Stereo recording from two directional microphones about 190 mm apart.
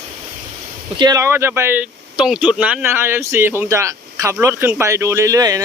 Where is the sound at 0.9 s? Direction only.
20° right (ahead or behind).